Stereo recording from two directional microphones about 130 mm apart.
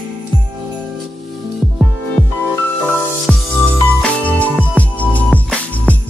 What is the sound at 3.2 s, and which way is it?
Music, 10° left (ahead or behind).